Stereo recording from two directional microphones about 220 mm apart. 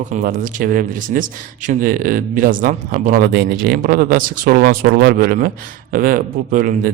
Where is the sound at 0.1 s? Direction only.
35° right (ahead or behind).